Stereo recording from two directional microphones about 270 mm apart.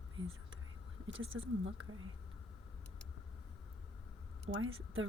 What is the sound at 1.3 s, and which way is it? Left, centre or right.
Speech, right.